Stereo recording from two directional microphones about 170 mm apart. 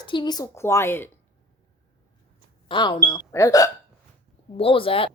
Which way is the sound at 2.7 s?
25° left (ahead or behind).